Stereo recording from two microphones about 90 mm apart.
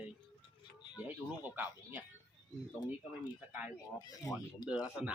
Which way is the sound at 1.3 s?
20° right (ahead or behind).